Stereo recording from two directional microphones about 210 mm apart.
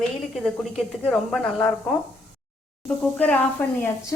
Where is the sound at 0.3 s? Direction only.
Centre (ahead or behind).